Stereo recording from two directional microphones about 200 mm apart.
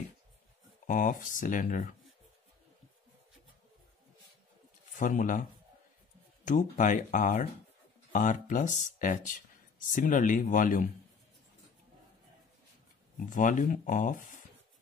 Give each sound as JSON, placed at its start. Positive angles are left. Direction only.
{"t": 0.8, "sound": "speech", "side_deg": 40}
{"t": 4.9, "sound": "speech", "side_deg": 40}
{"t": 13.3, "sound": "speech", "side_deg": 40}